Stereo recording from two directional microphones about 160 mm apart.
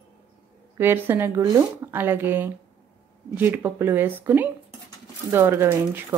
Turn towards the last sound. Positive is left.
turn(degrees=-15)  # may be behind; listen again after turning